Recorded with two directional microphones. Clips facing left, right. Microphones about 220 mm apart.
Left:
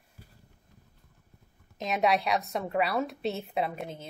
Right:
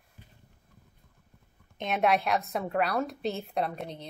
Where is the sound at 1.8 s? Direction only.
Centre (ahead or behind).